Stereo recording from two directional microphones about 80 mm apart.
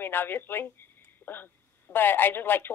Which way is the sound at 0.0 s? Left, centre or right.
Left.